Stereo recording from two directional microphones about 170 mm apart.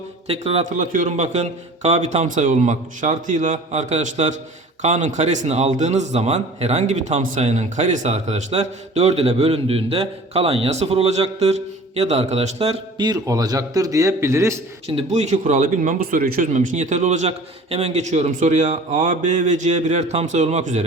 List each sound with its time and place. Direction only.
0.3 s a man's voice: 35° right (ahead or behind)
13.1 s a man's voice: 20° right (ahead or behind)
14.8 s a man's voice: 40° right (ahead or behind)